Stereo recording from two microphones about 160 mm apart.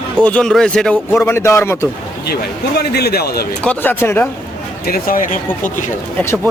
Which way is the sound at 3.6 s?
10° left (ahead or behind).